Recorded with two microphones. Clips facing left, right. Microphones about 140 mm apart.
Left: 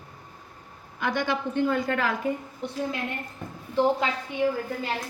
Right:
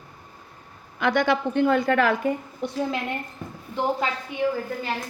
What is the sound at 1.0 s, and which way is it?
A woman's voice, 75° right (ahead or behind).